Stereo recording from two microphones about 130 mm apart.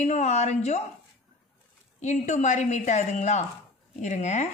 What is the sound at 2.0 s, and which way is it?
A woman's voice, 65° left (ahead or behind).